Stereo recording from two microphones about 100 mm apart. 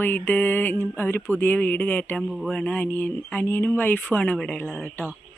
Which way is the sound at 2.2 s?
5° right (ahead or behind).